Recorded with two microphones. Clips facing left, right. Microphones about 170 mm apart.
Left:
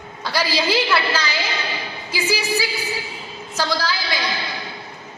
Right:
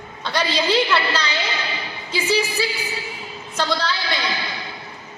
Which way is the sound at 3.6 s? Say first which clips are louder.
Even; 10° left (ahead or behind).